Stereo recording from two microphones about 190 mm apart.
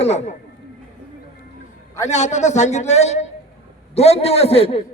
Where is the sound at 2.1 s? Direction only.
35° left (ahead or behind).